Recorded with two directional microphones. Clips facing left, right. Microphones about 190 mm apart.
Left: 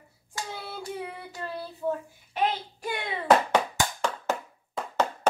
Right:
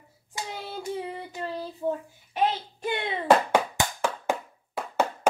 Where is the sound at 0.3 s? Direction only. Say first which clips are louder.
Right 1 dB; 20° right (ahead or behind).